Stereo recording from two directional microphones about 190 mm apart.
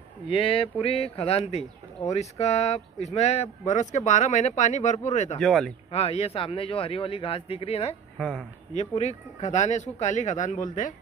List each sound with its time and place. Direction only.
0.3 s speech: 30° left (ahead or behind)
5.4 s speech: centre (ahead or behind)
5.9 s speech: 30° left (ahead or behind)
8.2 s speech: 5° left (ahead or behind)
8.7 s speech: 35° left (ahead or behind)